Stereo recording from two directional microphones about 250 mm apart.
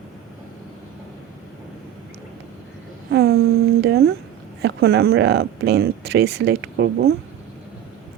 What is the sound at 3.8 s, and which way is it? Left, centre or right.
Speech, right.